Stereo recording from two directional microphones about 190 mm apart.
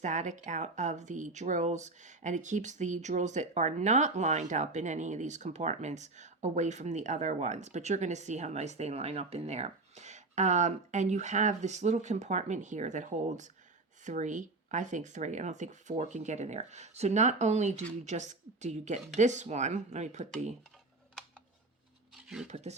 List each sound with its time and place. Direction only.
0.0 s speech: 40° right (ahead or behind)
22.1 s a sound: 5° right (ahead or behind)
22.4 s speech: 35° right (ahead or behind)